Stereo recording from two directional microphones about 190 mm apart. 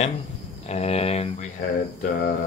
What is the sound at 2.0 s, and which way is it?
Mantra, 45° left (ahead or behind).